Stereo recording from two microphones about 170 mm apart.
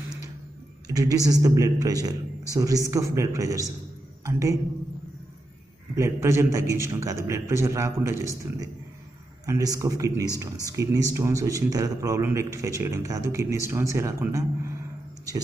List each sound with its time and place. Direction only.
0.8 s a man's voice: 20° right (ahead or behind)
5.9 s a man's voice: 15° right (ahead or behind)